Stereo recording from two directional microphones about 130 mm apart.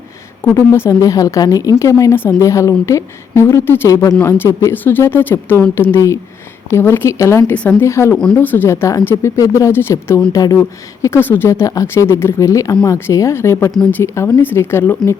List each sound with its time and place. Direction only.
0.4 s a woman's voice: 20° left (ahead or behind)
8.1 s speech: 5° left (ahead or behind)
8.4 s a woman's voice: 15° left (ahead or behind)